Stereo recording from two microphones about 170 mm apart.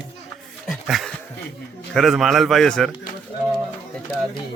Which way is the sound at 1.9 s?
Centre (ahead or behind).